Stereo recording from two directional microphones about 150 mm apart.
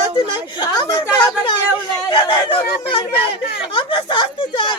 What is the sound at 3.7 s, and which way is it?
A woman's voice, 35° left (ahead or behind).